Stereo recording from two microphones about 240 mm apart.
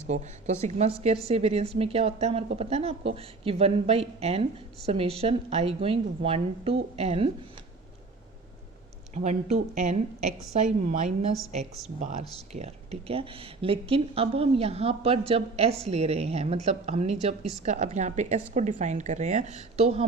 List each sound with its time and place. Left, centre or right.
0.1 s speech: right
9.1 s speech: right
12.5 s speech: right